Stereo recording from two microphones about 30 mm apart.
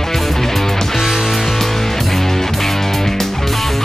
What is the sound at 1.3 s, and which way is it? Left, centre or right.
Music, centre.